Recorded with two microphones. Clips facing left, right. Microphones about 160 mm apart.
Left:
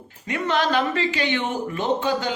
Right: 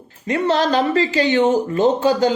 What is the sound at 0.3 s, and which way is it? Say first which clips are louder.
Speech: right 5 dB; 35° right (ahead or behind).